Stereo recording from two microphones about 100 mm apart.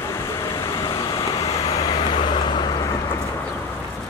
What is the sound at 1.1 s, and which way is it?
Vehicle, 65° left (ahead or behind).